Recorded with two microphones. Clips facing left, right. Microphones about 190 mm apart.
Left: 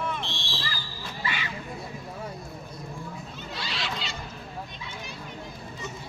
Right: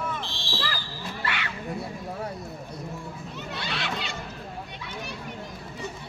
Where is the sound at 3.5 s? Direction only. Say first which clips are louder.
Right 2 dB; 60° right (ahead or behind).